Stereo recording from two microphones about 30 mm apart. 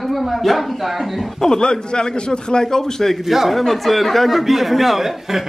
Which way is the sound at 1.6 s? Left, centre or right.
Left.